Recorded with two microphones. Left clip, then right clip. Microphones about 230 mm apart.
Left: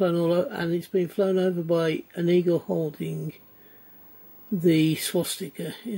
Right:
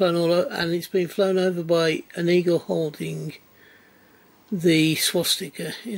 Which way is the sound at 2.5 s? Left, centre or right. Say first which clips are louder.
Right 3 dB; left.